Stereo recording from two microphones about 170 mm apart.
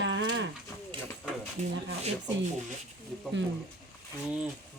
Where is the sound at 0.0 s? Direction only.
90° right.